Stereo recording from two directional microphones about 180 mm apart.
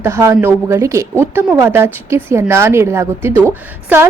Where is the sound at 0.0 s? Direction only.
15° right (ahead or behind).